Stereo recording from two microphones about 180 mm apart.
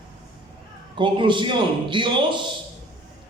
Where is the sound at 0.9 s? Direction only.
25° right (ahead or behind).